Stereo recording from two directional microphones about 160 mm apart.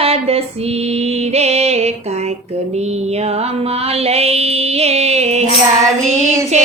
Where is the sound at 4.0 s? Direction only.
40° right (ahead or behind).